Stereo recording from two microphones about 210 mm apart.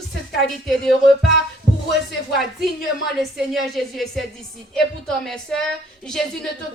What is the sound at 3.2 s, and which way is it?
A woman's voice, centre (ahead or behind).